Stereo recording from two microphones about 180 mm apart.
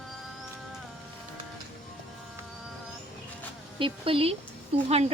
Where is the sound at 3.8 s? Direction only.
30° right (ahead or behind).